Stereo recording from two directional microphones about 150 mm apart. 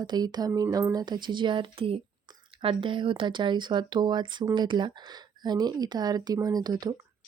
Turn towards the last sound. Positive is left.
turn(degrees=-25)  # may be behind; listen again after turning